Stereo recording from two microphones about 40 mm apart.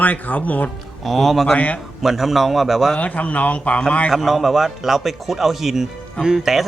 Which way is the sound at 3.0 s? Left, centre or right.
Left.